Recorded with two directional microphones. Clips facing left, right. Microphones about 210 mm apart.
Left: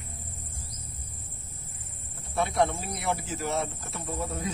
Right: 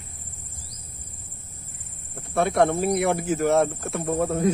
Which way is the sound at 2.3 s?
55° right (ahead or behind).